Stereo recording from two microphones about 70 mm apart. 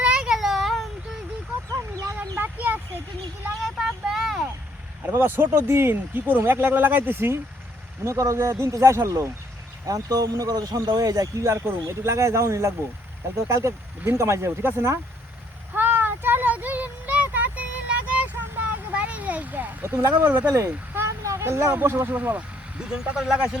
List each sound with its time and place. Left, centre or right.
0.0 s a sound: centre
0.3 s a sound: centre
1.7 s chicken: right
2.4 s a sound: right
3.8 s vehicle: centre
5.1 s speech: right
8.0 s speech: right
9.8 s speech: right
15.7 s a sound: right
20.0 s speech: right
22.0 s speech: right
22.9 s speech: centre